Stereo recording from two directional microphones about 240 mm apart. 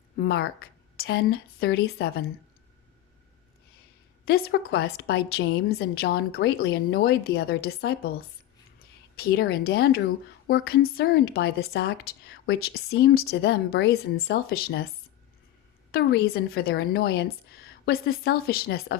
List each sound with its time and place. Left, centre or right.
0.2 s a woman's voice: left
4.3 s a woman's voice: left
9.1 s a woman's voice: left
15.9 s a woman's voice: left